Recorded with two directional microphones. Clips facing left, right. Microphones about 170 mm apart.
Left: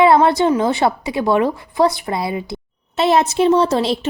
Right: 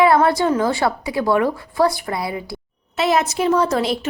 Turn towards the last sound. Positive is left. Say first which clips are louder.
# left 2 dB
turn(degrees=30)  # may be behind; listen again after turning